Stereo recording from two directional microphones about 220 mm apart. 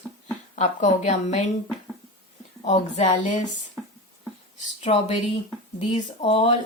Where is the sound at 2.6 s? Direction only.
30° left (ahead or behind).